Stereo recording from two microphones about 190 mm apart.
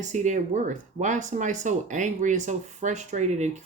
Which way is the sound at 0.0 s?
40° right (ahead or behind).